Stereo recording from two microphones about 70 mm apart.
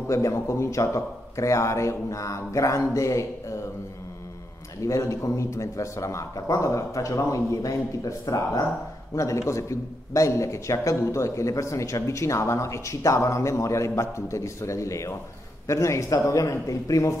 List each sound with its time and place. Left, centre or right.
0.1 s a man's voice: left
4.8 s a man's voice: left
9.1 s a man's voice: left